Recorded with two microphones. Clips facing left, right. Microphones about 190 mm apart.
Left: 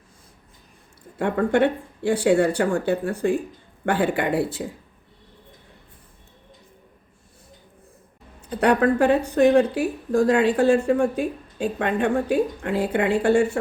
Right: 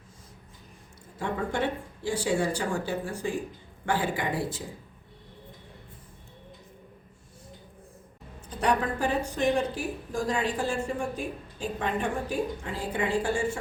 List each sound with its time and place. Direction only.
1.2 s a woman's voice: 60° left (ahead or behind)
8.4 s a woman's voice: 65° left (ahead or behind)